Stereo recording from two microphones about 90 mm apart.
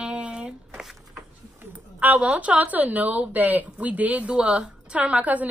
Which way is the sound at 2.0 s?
15° right (ahead or behind).